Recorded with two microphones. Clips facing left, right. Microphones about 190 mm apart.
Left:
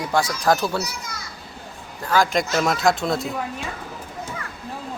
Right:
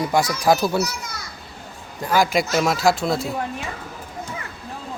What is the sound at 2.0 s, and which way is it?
Speech, 15° right (ahead or behind).